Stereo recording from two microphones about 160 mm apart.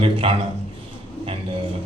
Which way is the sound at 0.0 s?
35° right (ahead or behind).